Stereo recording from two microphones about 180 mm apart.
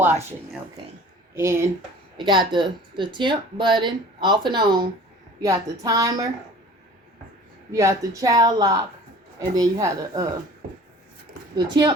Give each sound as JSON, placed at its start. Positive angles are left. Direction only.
{"t": 0.0, "sound": "speech", "side_deg": -10}
{"t": 2.1, "sound": "speech", "side_deg": -25}
{"t": 7.7, "sound": "speech", "side_deg": -20}
{"t": 11.5, "sound": "speech", "side_deg": -25}